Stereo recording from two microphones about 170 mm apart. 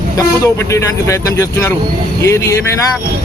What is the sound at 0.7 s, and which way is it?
Speech, 15° left (ahead or behind).